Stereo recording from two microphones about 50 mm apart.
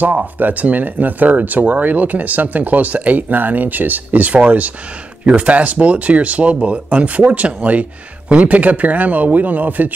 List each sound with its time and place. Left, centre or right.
0.0 s speech: right